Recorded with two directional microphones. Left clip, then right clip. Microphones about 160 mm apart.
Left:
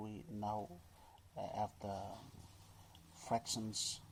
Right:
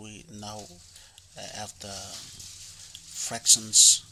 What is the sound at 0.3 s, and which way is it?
Frying, 20° right (ahead or behind).